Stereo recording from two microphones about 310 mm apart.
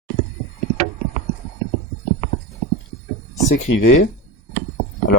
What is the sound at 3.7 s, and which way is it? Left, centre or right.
Speech, left.